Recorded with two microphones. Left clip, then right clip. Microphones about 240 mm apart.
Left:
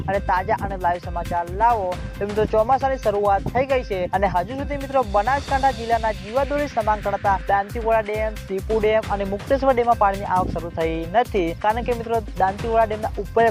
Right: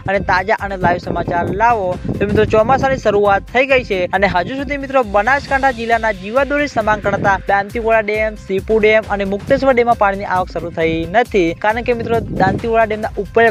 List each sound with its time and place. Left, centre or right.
0.1 s speech: right